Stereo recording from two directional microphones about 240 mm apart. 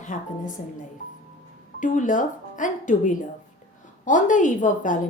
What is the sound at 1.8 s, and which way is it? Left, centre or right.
A woman's voice, left.